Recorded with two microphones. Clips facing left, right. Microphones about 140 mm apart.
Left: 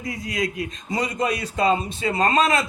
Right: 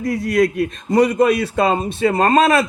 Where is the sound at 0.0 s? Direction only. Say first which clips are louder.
Right 10 dB; 65° right (ahead or behind).